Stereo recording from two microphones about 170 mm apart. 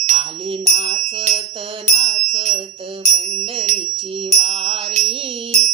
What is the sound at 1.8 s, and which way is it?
Music, 40° right (ahead or behind).